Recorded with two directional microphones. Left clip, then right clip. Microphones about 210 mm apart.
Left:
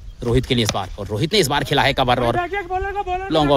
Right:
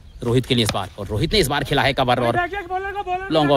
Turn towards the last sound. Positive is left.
turn(degrees=-5)  # may be behind; listen again after turning